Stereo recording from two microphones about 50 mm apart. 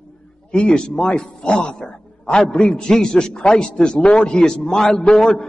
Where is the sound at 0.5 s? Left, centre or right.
Centre.